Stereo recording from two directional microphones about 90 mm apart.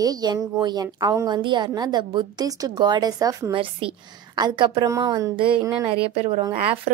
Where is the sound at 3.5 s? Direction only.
85° right.